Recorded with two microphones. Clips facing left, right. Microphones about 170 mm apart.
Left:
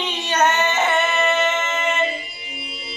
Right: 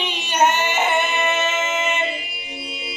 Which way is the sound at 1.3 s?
10° right (ahead or behind).